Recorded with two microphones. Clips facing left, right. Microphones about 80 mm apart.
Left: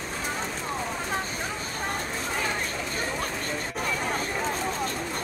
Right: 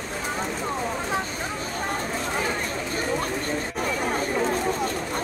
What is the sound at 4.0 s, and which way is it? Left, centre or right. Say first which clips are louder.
Chatter: right 4 dB; centre.